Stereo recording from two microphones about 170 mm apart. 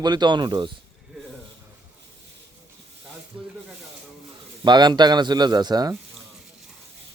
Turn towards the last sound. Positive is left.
turn(degrees=-25)  # may be behind; listen again after turning